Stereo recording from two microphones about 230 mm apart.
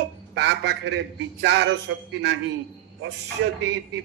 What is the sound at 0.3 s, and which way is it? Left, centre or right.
A man's voice, right.